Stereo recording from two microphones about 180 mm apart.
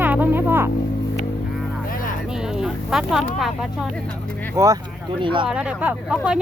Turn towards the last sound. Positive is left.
turn(degrees=-5)  # may be behind; listen again after turning